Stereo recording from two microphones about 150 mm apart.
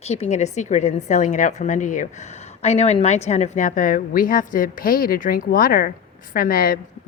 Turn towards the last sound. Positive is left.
turn(degrees=75)  # may be behind; listen again after turning